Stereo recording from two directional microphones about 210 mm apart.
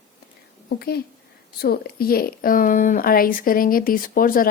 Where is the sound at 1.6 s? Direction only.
50° left (ahead or behind).